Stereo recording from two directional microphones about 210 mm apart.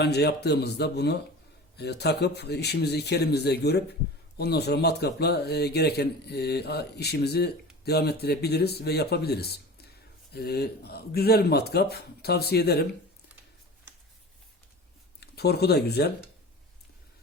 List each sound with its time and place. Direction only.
0.0 s a man's voice: 50° left (ahead or behind)
15.2 s speech: 50° left (ahead or behind)